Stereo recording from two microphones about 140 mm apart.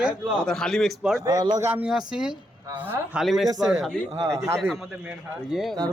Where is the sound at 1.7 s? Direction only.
5° right (ahead or behind).